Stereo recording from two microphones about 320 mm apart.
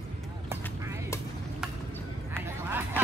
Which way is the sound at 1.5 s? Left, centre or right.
Centre.